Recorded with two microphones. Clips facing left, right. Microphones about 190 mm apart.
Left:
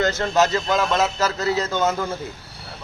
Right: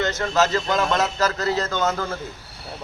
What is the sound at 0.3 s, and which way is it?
Speech, 15° left (ahead or behind).